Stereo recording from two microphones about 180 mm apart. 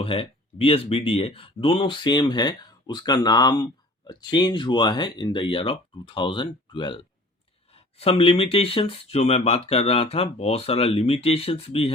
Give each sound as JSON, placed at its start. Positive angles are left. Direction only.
{"t": 0.0, "sound": "speech", "side_deg": 30}